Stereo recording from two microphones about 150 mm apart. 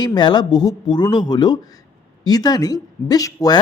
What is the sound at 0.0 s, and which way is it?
Speech, 30° left (ahead or behind).